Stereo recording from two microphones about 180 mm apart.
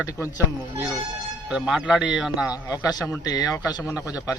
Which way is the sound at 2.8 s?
20° left (ahead or behind).